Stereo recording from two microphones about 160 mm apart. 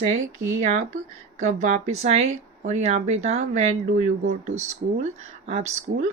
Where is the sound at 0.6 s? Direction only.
50° right (ahead or behind).